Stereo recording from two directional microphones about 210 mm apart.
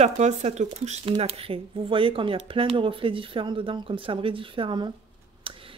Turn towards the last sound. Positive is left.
turn(degrees=-25)  # may be behind; listen again after turning